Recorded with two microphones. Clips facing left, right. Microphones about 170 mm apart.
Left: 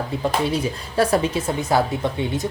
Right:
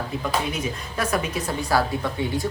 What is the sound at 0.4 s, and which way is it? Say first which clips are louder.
Speech: left 5 dB; 30° left (ahead or behind).